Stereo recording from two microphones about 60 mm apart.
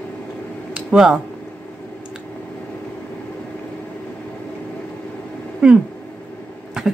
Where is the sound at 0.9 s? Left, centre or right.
Centre.